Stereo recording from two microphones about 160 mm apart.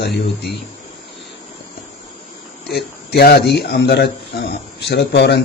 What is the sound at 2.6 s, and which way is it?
A man's voice, 90° left.